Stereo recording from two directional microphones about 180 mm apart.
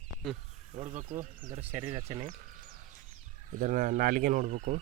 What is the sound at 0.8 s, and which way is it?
Speech, 35° right (ahead or behind).